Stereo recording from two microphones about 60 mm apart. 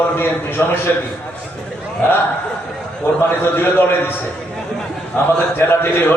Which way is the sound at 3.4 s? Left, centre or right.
Left.